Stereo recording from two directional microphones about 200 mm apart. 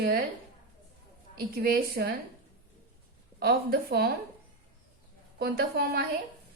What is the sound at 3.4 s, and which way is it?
Speech, 50° right (ahead or behind).